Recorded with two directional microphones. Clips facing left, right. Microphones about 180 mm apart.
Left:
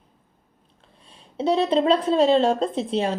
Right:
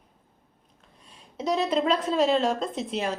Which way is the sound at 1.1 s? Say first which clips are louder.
Left 5 dB; 30° left (ahead or behind).